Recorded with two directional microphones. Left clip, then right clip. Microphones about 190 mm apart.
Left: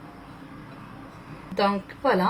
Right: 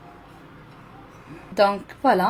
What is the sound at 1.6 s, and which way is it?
Speech, 50° right (ahead or behind).